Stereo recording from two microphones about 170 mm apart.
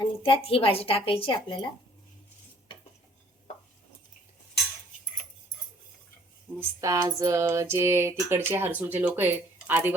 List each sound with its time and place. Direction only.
0.0 s speech: 30° left (ahead or behind)
6.6 s speech: 20° right (ahead or behind)